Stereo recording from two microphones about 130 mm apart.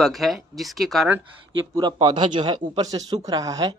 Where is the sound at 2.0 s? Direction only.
35° right (ahead or behind).